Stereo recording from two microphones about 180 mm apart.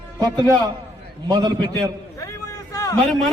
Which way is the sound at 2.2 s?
20° left (ahead or behind).